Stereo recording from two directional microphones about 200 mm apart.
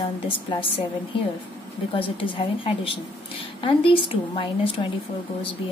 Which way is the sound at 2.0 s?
25° left (ahead or behind).